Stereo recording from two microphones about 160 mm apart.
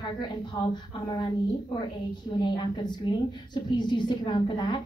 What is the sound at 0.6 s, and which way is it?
Speech, 25° left (ahead or behind).